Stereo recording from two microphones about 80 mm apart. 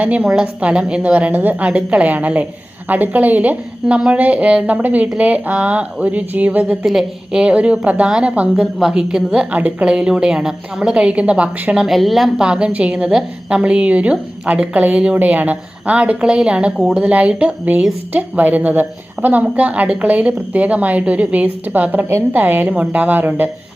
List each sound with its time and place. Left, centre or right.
0.0 s a woman's voice: centre
6.8 s a woman's voice: centre; by 23.5 s right